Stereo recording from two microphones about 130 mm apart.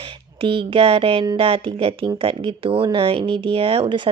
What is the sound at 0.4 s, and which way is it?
Speech, 45° right (ahead or behind).